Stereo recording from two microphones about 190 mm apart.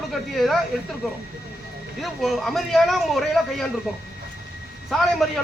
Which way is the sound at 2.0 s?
Centre (ahead or behind).